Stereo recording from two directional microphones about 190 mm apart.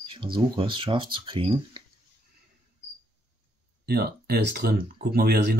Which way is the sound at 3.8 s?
55° right (ahead or behind).